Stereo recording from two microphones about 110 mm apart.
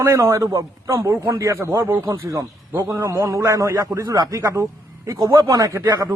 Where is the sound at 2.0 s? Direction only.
35° right (ahead or behind).